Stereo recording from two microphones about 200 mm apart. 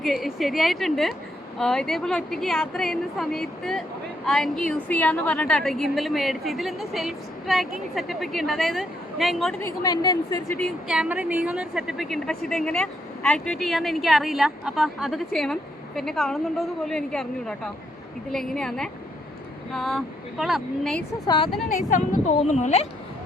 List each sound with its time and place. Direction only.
0.0 s a woman's voice: centre (ahead or behind)
9.6 s a woman's voice: 15° left (ahead or behind)
10.6 s a woman's voice: 5° right (ahead or behind)
21.2 s a woman's voice: 25° left (ahead or behind)
21.7 s speech: 40° left (ahead or behind)